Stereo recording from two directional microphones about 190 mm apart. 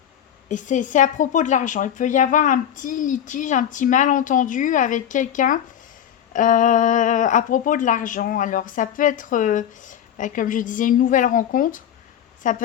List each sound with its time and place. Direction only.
0.4 s a woman's voice: 40° left (ahead or behind)